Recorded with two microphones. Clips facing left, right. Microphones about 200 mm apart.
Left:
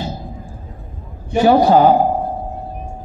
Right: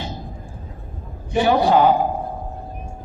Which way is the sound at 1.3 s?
40° left (ahead or behind).